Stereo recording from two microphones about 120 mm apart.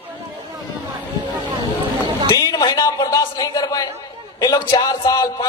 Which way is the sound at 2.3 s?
35° left (ahead or behind).